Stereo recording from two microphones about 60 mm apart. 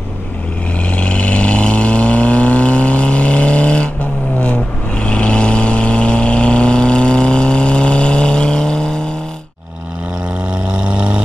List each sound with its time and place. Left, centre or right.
0.8 s vehicle: left
10.5 s vehicle: centre